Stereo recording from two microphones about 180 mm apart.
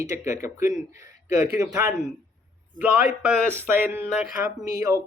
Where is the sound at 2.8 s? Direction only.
5° right (ahead or behind).